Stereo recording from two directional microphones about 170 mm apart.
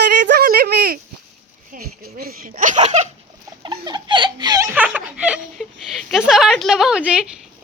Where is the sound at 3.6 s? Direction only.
25° right (ahead or behind); by 7.2 s 5° right (ahead or behind).